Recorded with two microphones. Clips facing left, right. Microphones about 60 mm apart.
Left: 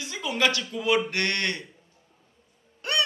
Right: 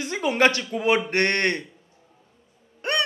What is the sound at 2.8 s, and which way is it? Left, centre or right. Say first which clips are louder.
Gasp: right 3 dB; right.